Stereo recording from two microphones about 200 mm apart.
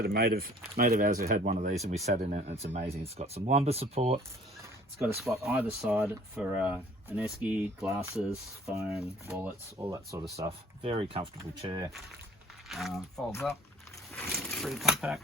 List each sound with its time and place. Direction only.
0.0 s speech: 50° right (ahead or behind); by 4.2 s 30° right (ahead or behind)
4.9 s speech: centre (ahead or behind)
10.8 s speech: 30° right (ahead or behind)
12.6 s speech: centre (ahead or behind)